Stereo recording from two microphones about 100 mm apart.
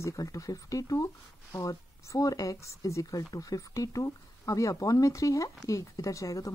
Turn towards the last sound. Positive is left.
turn(degrees=30)  # may be behind; listen again after turning